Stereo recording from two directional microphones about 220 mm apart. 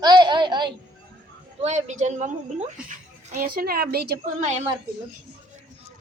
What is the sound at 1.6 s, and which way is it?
A woman's voice, 30° right (ahead or behind).